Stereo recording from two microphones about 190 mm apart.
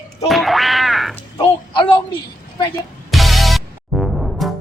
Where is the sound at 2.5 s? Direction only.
20° left (ahead or behind).